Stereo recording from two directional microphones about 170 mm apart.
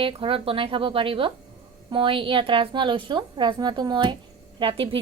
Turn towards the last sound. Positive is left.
turn(degrees=-30)  # may be behind; listen again after turning